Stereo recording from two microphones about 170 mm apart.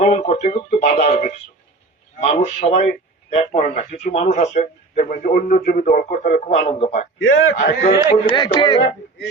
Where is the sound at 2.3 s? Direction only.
40° left (ahead or behind).